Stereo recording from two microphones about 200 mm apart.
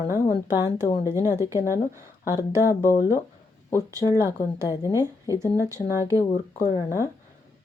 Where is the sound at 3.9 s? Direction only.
15° right (ahead or behind).